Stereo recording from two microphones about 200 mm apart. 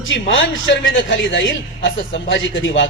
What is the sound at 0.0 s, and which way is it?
A man's voice, 75° left (ahead or behind).